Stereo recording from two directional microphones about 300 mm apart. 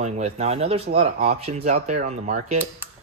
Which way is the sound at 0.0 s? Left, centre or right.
Right.